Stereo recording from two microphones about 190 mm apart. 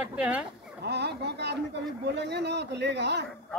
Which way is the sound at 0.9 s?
60° right (ahead or behind).